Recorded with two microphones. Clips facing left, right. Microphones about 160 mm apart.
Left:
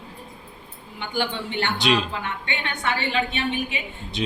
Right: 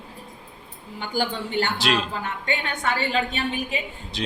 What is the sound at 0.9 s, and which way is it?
Speech, 40° right (ahead or behind).